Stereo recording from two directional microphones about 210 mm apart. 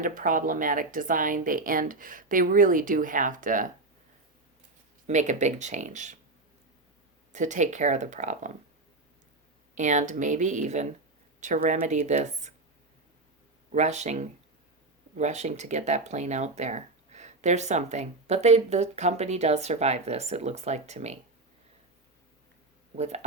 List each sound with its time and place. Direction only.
0.0 s speech: 40° right (ahead or behind)
5.0 s speech: 35° right (ahead or behind)
7.3 s speech: 35° right (ahead or behind)
9.7 s speech: 35° right (ahead or behind)
13.7 s speech: 35° right (ahead or behind)
23.0 s speech: 30° right (ahead or behind)